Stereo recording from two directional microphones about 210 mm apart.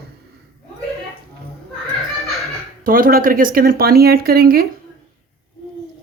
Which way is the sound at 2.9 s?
40° right (ahead or behind).